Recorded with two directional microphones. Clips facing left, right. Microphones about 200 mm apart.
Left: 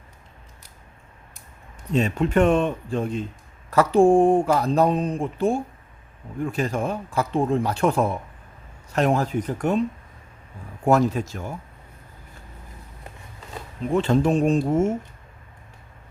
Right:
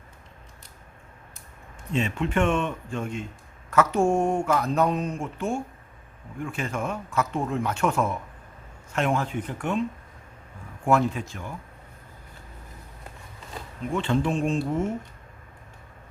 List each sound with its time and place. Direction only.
1.9 s speech: 40° left (ahead or behind)
10.8 s speech: 40° left (ahead or behind)
13.9 s speech: 40° left (ahead or behind)